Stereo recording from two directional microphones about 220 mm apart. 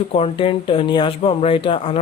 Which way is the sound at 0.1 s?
25° left (ahead or behind).